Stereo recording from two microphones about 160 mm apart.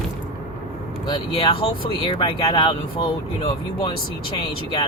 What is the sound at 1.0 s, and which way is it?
Speech, 25° left (ahead or behind).